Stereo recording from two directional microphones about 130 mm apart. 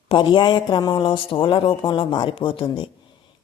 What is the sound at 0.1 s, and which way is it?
Speech, 35° left (ahead or behind).